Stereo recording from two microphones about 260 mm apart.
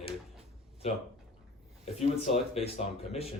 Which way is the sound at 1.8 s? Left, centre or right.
Left.